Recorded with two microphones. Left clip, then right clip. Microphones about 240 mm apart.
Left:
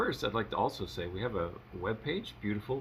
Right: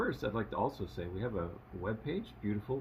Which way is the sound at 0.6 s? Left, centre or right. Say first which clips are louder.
Left 1 dB; left.